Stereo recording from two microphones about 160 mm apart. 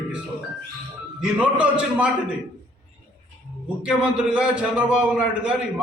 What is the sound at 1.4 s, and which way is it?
Speech, 10° right (ahead or behind).